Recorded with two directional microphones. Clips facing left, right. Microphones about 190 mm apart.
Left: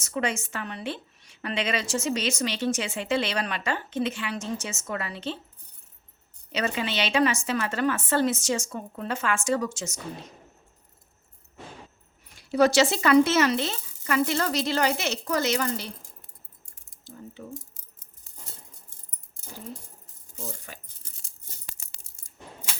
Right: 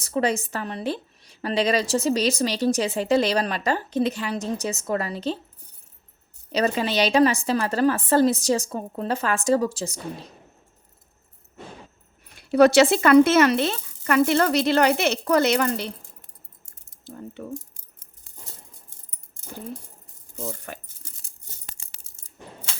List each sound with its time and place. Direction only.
0.0 s a woman's voice: 35° right (ahead or behind)
6.5 s a woman's voice: 35° right (ahead or behind)
12.3 s speech: 60° right (ahead or behind)
17.0 s speech: 60° right (ahead or behind)
20.3 s speech: 70° right (ahead or behind)